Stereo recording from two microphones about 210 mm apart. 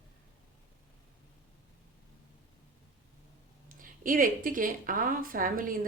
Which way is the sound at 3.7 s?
40° right (ahead or behind).